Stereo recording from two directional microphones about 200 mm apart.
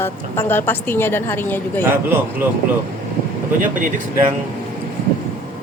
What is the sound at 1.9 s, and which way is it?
Speech, 10° right (ahead or behind).